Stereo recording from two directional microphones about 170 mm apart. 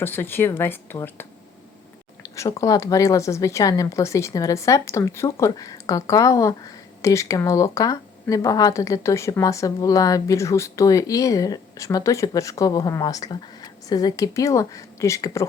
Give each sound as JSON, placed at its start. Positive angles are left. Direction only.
{"t": 0.0, "sound": "speech", "side_deg": 10}
{"t": 2.3, "sound": "speech", "side_deg": 20}